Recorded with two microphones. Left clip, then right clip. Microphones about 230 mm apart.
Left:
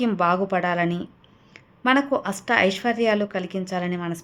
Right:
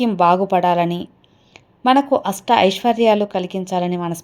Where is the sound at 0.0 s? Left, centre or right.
Centre.